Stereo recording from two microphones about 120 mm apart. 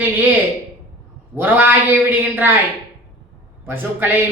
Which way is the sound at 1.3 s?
15° right (ahead or behind).